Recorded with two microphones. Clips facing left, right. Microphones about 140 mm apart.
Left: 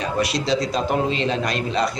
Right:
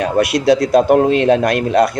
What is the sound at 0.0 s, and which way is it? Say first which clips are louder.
A man's voice: right 8 dB; 60° right (ahead or behind).